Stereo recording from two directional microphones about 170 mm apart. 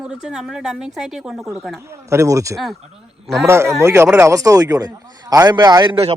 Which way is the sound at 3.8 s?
15° right (ahead or behind).